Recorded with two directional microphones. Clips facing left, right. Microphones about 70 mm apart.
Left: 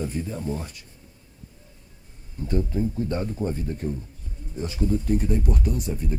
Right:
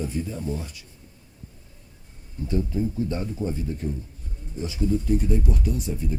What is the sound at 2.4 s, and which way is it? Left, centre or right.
Speech, left.